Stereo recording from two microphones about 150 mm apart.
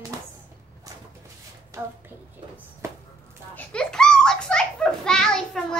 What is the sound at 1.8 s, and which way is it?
Speech, 15° right (ahead or behind).